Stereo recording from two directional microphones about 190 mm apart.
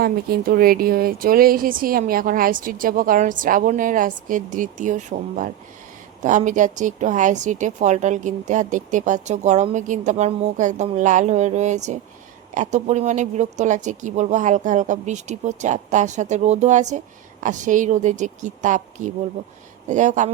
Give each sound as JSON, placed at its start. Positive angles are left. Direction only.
{"t": 0.0, "sound": "a woman's voice", "side_deg": -55}